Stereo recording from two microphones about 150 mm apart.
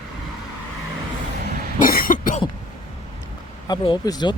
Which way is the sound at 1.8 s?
70° left (ahead or behind).